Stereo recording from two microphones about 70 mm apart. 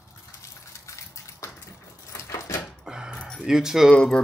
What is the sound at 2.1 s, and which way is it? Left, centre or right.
Door, left.